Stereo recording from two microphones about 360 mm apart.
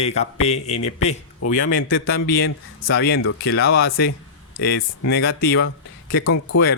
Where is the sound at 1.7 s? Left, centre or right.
Left.